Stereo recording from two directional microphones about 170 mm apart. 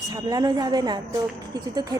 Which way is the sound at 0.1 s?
20° right (ahead or behind).